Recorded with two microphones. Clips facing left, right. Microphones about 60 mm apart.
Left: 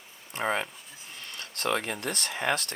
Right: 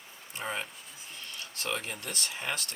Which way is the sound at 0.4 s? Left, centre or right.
Left.